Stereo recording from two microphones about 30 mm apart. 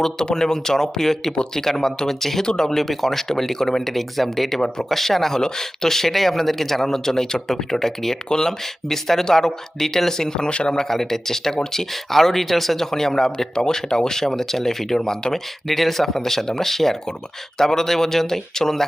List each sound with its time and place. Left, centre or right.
0.2 s speech: left
2.8 s speech: centre; by 10.8 s left
10.8 s speech: centre
15.6 s speech: centre